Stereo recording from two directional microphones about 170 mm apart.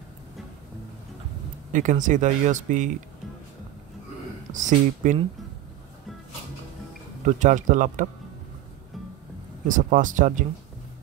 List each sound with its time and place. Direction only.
1.7 s speech: 50° right (ahead or behind)
4.5 s speech: 50° right (ahead or behind)
7.2 s speech: 45° right (ahead or behind)
9.7 s speech: 50° right (ahead or behind)